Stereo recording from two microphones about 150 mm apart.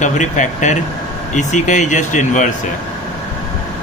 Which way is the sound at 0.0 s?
55° left (ahead or behind).